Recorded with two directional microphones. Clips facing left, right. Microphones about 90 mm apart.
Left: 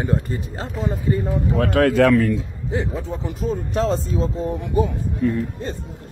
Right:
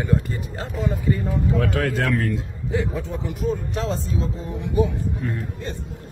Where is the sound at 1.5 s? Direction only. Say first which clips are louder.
Left 10 dB; 60° left (ahead or behind); by 2.1 s 75° left (ahead or behind).